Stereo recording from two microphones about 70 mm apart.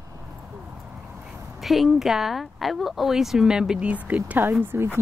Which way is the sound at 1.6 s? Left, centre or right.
Centre.